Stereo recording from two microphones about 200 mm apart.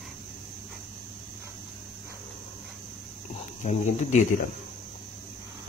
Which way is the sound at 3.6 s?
35° left (ahead or behind).